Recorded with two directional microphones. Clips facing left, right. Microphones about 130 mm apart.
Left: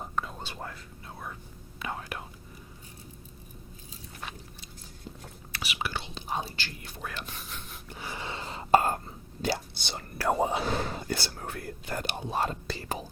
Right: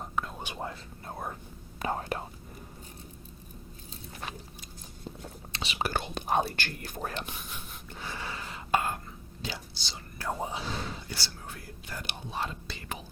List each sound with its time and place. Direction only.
0.0 s whispering: centre (ahead or behind)
0.3 s whispering: 15° right (ahead or behind)
1.0 s whispering: 45° right (ahead or behind)
5.5 s whispering: 25° right (ahead or behind)
5.9 s whispering: 50° right (ahead or behind)
7.9 s whispering: 15° left (ahead or behind); by 9.6 s 40° left (ahead or behind)
9.7 s whispering: 60° left (ahead or behind); by 13.1 s 35° left (ahead or behind)